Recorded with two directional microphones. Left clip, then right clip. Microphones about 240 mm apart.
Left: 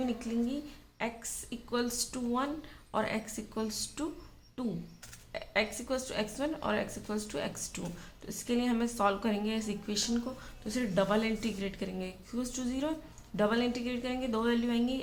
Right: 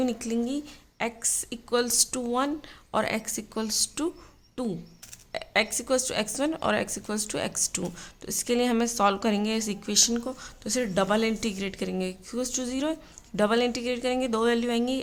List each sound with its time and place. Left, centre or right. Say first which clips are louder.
0.0 s a woman's voice: right 6 dB; right